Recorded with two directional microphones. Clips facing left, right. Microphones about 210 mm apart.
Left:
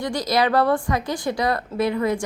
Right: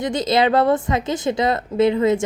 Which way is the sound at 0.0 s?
20° right (ahead or behind).